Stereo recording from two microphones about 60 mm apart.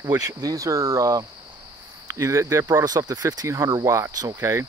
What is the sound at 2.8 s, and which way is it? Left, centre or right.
Speech, right.